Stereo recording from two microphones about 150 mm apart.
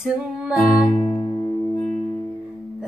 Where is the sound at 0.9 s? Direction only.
45° left (ahead or behind).